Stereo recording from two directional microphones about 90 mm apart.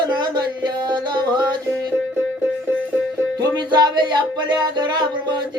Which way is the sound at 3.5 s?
55° right (ahead or behind).